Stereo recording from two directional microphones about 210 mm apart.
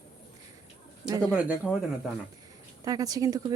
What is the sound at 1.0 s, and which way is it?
Speech, 15° right (ahead or behind).